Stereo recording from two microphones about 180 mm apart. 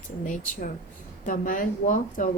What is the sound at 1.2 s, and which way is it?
A woman's voice, 45° left (ahead or behind).